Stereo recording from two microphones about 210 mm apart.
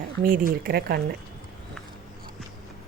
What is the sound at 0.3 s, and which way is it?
Speech, 45° right (ahead or behind).